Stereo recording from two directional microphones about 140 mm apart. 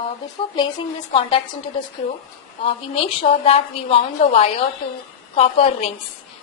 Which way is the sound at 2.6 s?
45° left (ahead or behind).